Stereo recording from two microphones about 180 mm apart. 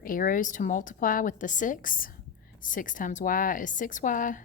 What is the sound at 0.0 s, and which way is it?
A woman's voice, 50° left (ahead or behind).